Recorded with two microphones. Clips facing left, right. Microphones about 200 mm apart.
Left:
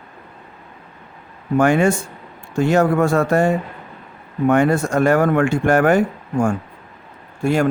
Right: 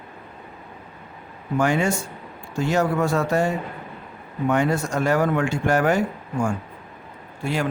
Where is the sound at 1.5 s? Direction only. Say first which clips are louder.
Left 6 dB; 55° left (ahead or behind).